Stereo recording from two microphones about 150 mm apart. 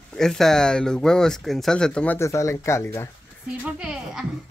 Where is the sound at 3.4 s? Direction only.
5° right (ahead or behind).